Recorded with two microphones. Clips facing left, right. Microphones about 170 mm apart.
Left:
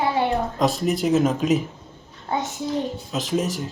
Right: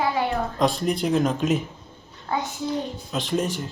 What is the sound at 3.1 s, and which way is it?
Speech, centre (ahead or behind).